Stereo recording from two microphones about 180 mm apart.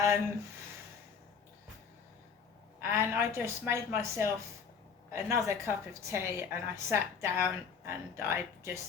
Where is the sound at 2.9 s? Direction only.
15° right (ahead or behind).